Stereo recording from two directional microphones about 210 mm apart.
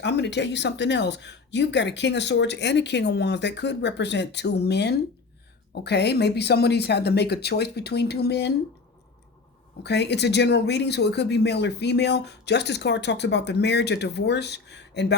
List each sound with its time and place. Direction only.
0.0 s speech: 55° left (ahead or behind)
9.8 s speech: 55° left (ahead or behind)